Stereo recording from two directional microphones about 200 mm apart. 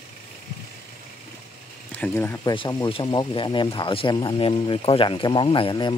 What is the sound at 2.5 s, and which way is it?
Speech, 25° left (ahead or behind).